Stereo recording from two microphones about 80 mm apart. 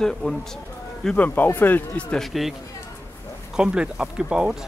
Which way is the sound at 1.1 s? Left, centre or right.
Left.